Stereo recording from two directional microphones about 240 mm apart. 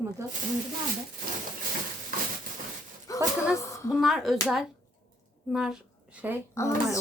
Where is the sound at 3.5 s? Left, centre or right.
Centre.